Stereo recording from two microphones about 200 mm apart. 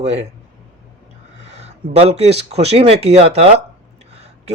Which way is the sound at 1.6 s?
30° right (ahead or behind).